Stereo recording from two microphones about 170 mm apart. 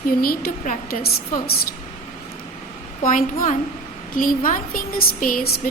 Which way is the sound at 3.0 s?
50° left (ahead or behind).